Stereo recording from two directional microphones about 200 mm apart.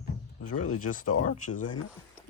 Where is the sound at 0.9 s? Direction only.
40° left (ahead or behind).